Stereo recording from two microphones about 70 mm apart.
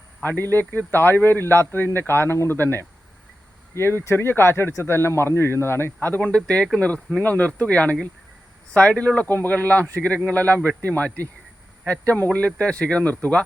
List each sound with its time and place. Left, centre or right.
0.2 s a man's voice: left
6.1 s speech: centre